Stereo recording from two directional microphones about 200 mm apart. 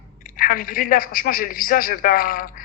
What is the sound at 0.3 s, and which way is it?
A man's voice, 45° left (ahead or behind).